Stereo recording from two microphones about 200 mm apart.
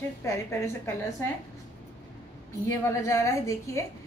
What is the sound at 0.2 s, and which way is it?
Speech, 15° left (ahead or behind).